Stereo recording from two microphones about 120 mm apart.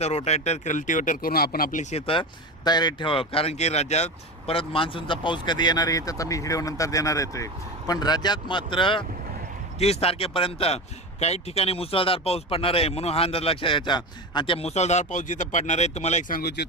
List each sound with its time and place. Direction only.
0.3 s speech: 65° left (ahead or behind); by 1.1 s 90° left
1.7 s speech: 70° left (ahead or behind)
2.6 s speech: 35° left (ahead or behind)
9.7 s speech: 60° left (ahead or behind)